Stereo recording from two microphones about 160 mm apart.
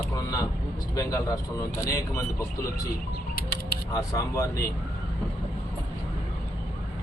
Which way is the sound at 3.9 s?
20° left (ahead or behind).